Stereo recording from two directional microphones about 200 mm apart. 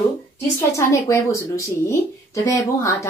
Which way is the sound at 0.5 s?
15° left (ahead or behind).